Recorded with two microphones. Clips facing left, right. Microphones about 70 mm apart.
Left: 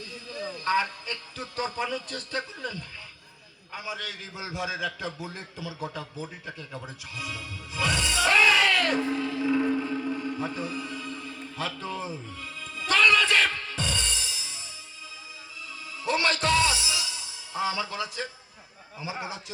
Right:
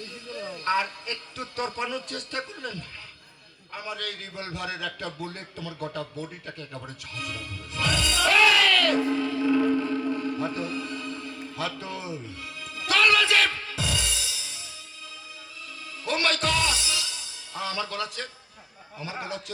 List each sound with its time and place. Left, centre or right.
0.3 s a sound: centre
1.1 s a man's voice: centre
8.6 s a sound: centre
9.1 s chant: centre
10.5 s music: centre
11.3 s music: centre
12.8 s music: centre
14.2 s music: right
16.0 s music: centre
18.9 s a man's voice: centre